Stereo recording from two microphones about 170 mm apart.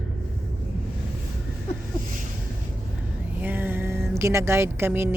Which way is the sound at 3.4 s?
10° right (ahead or behind).